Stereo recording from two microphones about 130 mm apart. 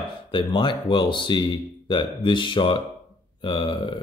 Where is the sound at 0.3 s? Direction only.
35° left (ahead or behind).